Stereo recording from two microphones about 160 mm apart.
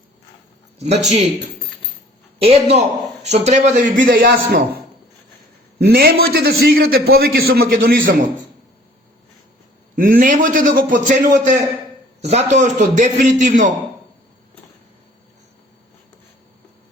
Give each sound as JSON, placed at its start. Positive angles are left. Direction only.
{"t": 0.9, "sound": "a man's voice", "side_deg": -45}
{"t": 4.3, "sound": "a man's voice", "side_deg": -70}
{"t": 5.8, "sound": "a man's voice", "side_deg": -70}
{"t": 9.9, "sound": "a man's voice", "side_deg": -60}
{"t": 12.2, "sound": "a man's voice", "side_deg": -40}